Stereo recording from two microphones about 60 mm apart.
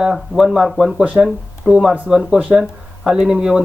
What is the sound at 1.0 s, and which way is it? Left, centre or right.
Speech, right.